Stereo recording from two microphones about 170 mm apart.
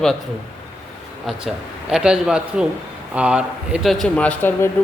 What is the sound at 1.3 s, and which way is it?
Speech, centre (ahead or behind).